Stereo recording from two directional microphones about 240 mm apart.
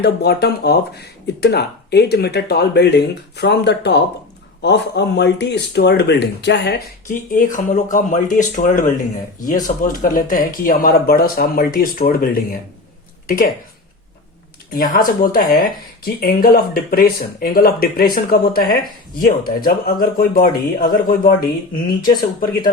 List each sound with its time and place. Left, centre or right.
0.0 s speech: left
14.7 s speech: left